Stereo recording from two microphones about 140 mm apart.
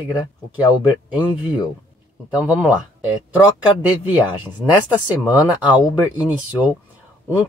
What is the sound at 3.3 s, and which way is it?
Speech, 25° left (ahead or behind).